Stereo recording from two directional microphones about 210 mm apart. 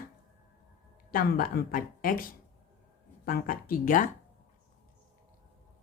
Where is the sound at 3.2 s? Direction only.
40° left (ahead or behind).